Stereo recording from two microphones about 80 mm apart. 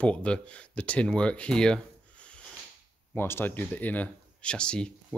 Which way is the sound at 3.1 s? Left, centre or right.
Left.